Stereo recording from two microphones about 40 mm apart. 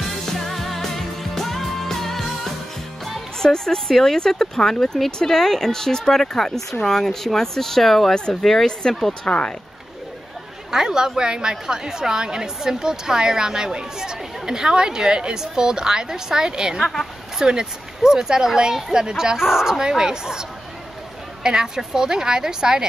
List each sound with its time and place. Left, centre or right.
0.5 s music: centre
3.3 s speech: centre
8.1 s speech: centre
10.7 s a woman's voice: centre
16.8 s speech: centre
17.4 s a woman's voice: centre